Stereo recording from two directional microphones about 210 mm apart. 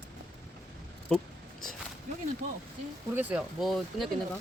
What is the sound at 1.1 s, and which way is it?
Speech, centre (ahead or behind).